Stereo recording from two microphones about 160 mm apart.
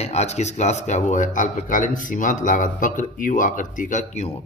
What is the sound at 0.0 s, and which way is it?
Speech, 45° left (ahead or behind).